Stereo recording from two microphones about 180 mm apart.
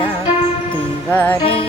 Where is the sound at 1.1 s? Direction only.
10° left (ahead or behind).